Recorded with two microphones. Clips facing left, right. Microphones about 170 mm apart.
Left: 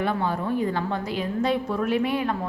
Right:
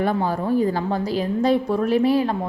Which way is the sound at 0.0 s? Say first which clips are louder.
Right 4 dB; 40° right (ahead or behind).